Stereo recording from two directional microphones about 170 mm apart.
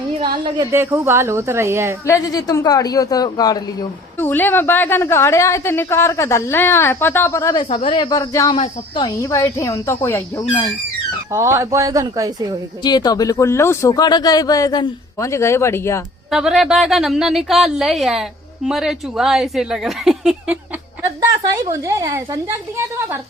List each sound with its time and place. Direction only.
0.4 s speech: 25° right (ahead or behind)
0.7 s a woman's voice: 15° right (ahead or behind)
2.0 s speech: 20° left (ahead or behind)
4.3 s a woman's voice: 10° left (ahead or behind)
7.5 s a woman's voice: 30° left (ahead or behind); by 10.4 s 15° left (ahead or behind)
11.3 s speech: 15° right (ahead or behind)
12.8 s speech: 25° left (ahead or behind)
16.3 s a woman's voice: centre (ahead or behind)
21.7 s a woman's voice: 15° right (ahead or behind)